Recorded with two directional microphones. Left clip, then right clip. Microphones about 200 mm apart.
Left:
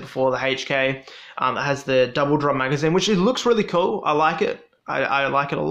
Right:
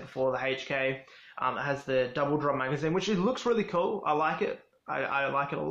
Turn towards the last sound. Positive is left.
turn(degrees=40)  # may be behind; listen again after turning